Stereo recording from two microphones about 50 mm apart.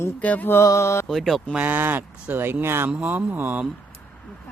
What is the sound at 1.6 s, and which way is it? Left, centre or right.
Speech, right.